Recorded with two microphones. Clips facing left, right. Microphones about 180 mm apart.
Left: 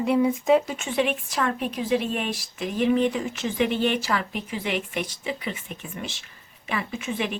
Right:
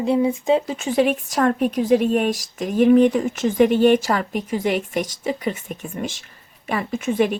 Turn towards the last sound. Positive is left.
turn(degrees=-45)  # may be behind; listen again after turning